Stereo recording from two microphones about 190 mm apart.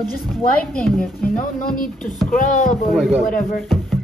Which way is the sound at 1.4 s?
45° left (ahead or behind).